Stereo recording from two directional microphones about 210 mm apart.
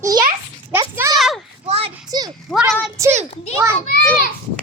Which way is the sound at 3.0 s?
15° right (ahead or behind).